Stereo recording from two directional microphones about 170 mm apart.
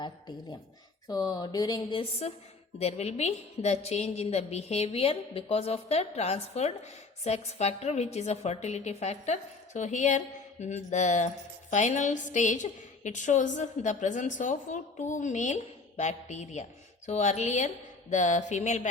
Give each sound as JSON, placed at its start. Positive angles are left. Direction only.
{"t": 1.0, "sound": "a woman's voice", "side_deg": 20}